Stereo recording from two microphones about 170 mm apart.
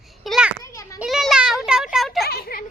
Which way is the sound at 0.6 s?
20° left (ahead or behind).